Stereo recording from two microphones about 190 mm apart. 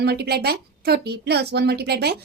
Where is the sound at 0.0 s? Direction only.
55° right (ahead or behind).